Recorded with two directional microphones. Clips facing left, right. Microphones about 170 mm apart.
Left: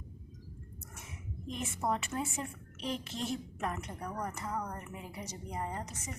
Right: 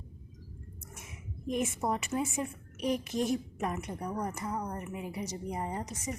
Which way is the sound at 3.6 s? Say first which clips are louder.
Right 3 dB; 10° right (ahead or behind).